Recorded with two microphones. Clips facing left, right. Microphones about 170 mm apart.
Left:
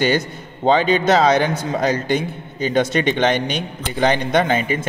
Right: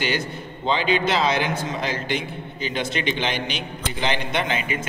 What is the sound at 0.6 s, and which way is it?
A man's voice, 45° left (ahead or behind).